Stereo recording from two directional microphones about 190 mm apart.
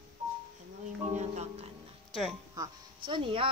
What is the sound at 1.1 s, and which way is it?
Speech, 35° right (ahead or behind).